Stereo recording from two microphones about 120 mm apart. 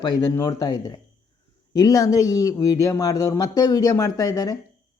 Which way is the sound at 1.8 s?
30° left (ahead or behind).